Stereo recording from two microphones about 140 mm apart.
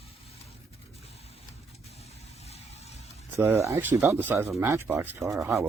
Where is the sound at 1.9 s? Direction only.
50° left (ahead or behind).